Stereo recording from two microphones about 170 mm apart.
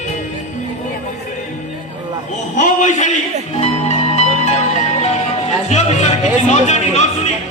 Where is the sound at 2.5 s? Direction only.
45° left (ahead or behind).